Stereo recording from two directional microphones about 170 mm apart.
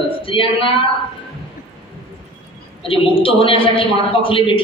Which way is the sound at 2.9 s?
30° left (ahead or behind).